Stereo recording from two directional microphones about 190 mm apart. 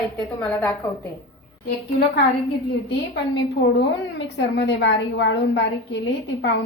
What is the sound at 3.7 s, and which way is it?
A woman's voice, 65° left (ahead or behind).